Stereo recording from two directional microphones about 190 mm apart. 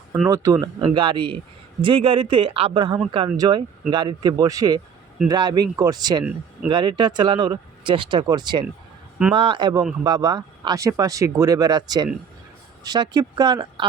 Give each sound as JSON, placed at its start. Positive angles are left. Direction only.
{"t": 0.3, "sound": "speech", "side_deg": -20}